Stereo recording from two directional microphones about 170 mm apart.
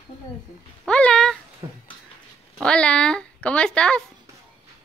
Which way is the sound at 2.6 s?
5° left (ahead or behind).